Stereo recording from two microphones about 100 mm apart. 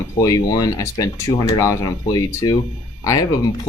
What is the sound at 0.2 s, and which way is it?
Speech, 40° left (ahead or behind).